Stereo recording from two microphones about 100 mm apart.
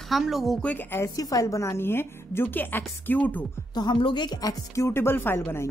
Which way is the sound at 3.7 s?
50° left (ahead or behind).